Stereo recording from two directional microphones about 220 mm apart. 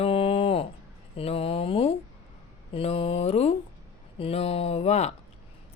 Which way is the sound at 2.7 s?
25° left (ahead or behind).